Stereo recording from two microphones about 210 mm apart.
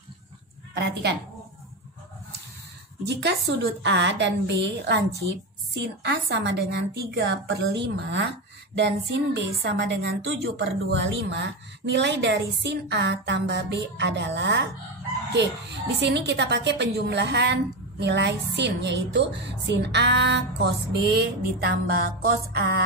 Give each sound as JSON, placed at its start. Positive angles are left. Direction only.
{"t": 3.1, "sound": "a woman's voice", "side_deg": -55}